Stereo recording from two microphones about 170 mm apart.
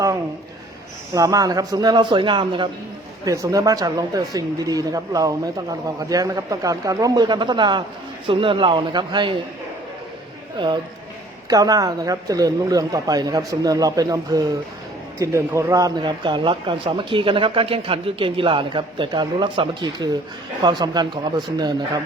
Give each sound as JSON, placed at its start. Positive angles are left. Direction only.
{"t": 1.1, "sound": "speech", "side_deg": -20}
{"t": 10.6, "sound": "speech", "side_deg": -25}